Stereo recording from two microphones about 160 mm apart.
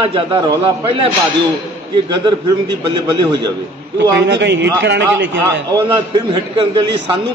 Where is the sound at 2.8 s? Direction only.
25° right (ahead or behind).